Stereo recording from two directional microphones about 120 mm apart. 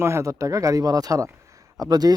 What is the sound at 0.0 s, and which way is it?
Speech, 25° right (ahead or behind).